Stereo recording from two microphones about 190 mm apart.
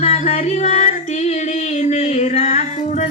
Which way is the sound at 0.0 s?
30° left (ahead or behind).